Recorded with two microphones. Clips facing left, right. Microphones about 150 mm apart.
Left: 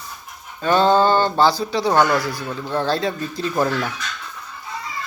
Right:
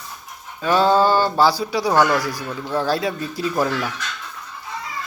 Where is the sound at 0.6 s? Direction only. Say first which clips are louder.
Left 1 dB; 5° right (ahead or behind).